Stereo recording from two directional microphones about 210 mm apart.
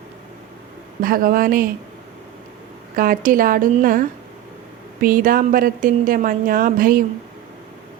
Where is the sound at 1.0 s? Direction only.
45° right (ahead or behind).